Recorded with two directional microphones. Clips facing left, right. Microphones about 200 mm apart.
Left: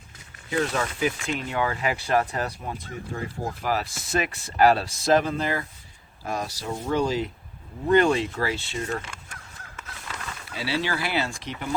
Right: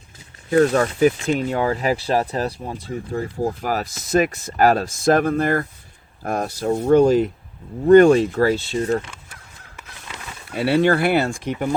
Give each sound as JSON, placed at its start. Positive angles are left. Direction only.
{"t": 0.6, "sound": "speech", "side_deg": -40}
{"t": 10.5, "sound": "speech", "side_deg": -55}